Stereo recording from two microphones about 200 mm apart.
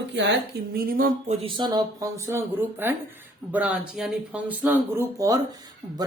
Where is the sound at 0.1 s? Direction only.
60° right (ahead or behind); by 1.4 s 45° right (ahead or behind).